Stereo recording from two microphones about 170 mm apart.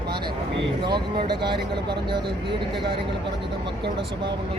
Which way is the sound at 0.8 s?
25° right (ahead or behind).